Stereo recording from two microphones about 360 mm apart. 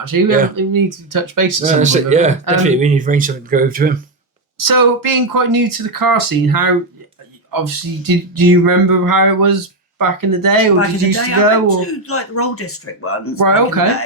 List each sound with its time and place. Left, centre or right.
0.0 s speech: right
1.6 s speech: centre
4.5 s speech: right
10.8 s speech: left
13.4 s speech: right